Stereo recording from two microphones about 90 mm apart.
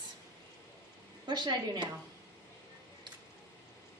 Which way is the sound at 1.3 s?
55° right (ahead or behind).